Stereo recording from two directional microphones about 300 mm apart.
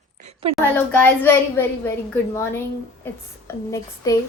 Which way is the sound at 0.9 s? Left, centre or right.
Centre.